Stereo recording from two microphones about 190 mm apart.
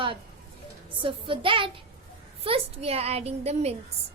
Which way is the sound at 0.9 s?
25° right (ahead or behind).